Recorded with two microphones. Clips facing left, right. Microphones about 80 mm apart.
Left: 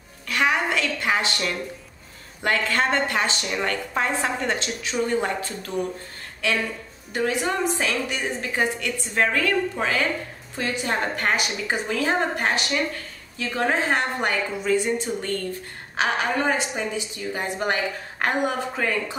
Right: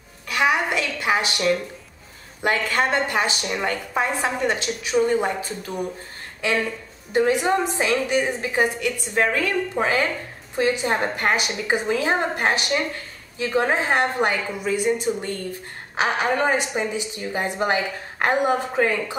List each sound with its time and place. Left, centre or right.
0.3 s a sound: centre
2.4 s a woman's voice: centre
7.2 s a woman's voice: right